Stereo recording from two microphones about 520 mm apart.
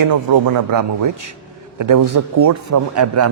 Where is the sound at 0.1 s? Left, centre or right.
Right.